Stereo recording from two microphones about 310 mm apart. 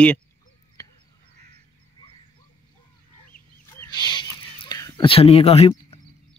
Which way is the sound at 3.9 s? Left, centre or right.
Centre.